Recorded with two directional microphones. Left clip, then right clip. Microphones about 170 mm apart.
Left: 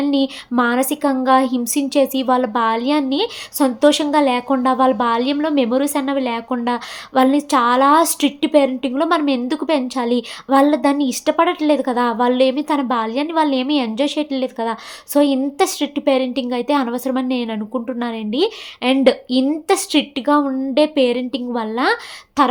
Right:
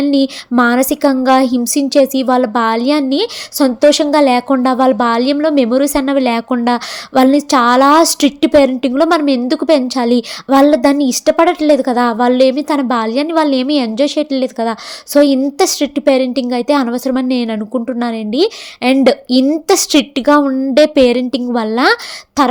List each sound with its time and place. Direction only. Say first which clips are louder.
0.0 s a woman's voice: right 5 dB; 30° right (ahead or behind)
22.4 s throat clearing: right 3 dB; 30° right (ahead or behind)